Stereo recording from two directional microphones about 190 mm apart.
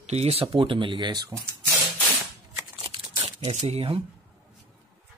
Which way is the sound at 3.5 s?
35° right (ahead or behind).